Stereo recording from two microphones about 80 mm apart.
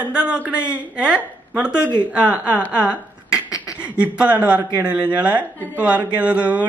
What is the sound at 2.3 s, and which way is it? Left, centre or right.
Speech, centre.